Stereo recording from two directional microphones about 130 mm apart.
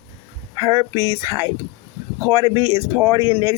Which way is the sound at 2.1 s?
20° right (ahead or behind).